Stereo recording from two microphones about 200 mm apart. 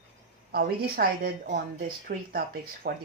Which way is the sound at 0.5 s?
50° right (ahead or behind).